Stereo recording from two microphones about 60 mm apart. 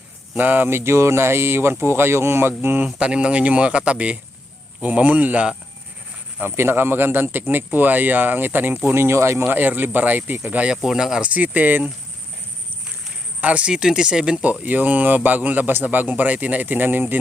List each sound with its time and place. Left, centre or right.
0.3 s speech: right
2.5 s a man's voice: right
2.8 s a man's voice: centre
6.4 s a man's voice: right
8.9 s a man's voice: right
10.8 s speech: centre
11.3 s a man's voice: right
13.4 s speech: right
14.6 s a man's voice: right